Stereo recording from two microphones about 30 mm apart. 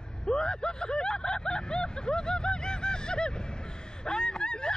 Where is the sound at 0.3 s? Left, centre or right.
Left.